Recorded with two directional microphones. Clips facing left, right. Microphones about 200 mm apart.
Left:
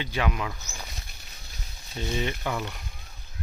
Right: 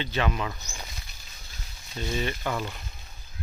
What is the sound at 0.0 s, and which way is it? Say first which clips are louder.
Speech: right 1 dB; 10° left (ahead or behind).